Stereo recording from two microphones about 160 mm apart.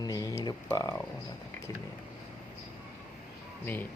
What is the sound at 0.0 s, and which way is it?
Speech, 25° left (ahead or behind).